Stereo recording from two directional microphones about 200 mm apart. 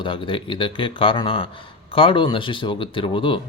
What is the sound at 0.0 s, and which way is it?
Speech, 25° left (ahead or behind).